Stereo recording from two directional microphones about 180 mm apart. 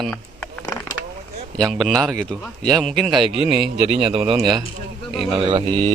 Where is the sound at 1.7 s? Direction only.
5° left (ahead or behind).